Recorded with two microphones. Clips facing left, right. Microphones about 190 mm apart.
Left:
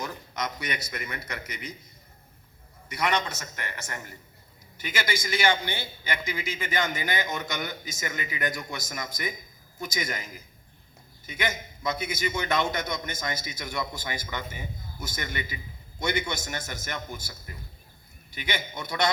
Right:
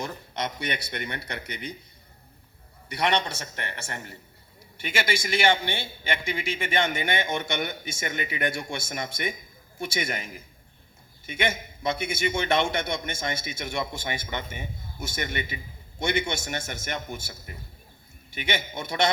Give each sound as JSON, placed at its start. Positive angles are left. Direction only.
{"t": 0.0, "sound": "speech", "side_deg": -30}
{"t": 2.9, "sound": "a man's voice", "side_deg": -30}